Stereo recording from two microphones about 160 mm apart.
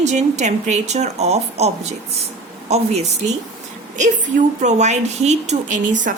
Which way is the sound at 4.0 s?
50° right (ahead or behind).